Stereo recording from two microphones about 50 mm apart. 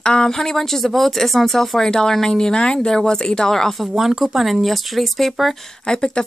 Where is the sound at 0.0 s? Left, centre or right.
Centre.